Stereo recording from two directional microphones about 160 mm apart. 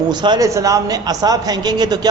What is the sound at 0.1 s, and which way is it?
A man's voice, 25° right (ahead or behind).